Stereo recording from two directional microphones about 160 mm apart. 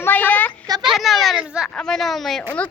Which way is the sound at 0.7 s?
25° right (ahead or behind).